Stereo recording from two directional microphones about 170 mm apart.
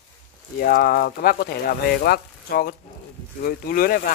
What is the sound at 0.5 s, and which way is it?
Speech, 60° left (ahead or behind).